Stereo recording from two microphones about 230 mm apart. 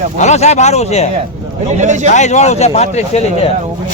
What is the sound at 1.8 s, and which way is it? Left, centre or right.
Speech, right.